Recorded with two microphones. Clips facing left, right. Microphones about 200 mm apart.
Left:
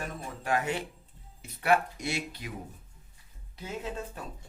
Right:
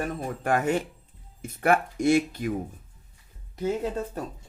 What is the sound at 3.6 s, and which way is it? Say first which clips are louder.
Speech: right 9 dB; 40° right (ahead or behind).